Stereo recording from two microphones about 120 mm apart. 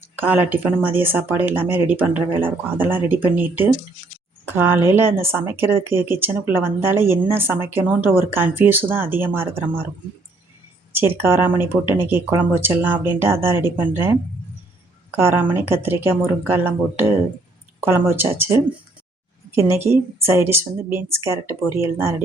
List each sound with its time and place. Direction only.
0.2 s speech: 15° right (ahead or behind)
10.9 s speech: 20° right (ahead or behind)
15.1 s speech: 20° right (ahead or behind)